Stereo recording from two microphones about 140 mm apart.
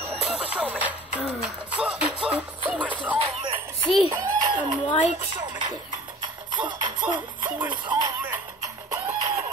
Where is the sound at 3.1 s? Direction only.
40° right (ahead or behind).